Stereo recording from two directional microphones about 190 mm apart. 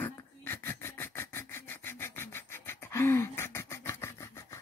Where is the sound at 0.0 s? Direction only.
10° left (ahead or behind).